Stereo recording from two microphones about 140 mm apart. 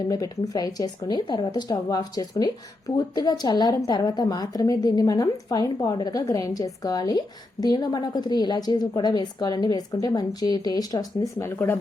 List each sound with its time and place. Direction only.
0.1 s speech: 25° left (ahead or behind)